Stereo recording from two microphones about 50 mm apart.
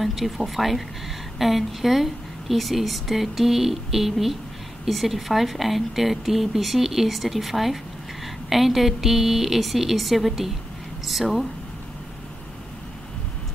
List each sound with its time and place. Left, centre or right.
0.0 s a woman's voice: centre